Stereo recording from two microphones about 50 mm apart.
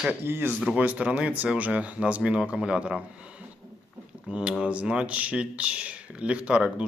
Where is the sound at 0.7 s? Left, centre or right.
Right.